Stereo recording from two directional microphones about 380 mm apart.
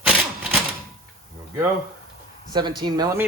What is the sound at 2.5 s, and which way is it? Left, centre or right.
Speech, centre.